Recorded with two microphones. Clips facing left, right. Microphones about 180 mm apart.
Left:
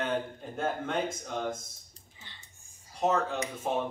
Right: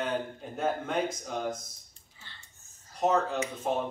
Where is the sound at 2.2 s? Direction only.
15° left (ahead or behind).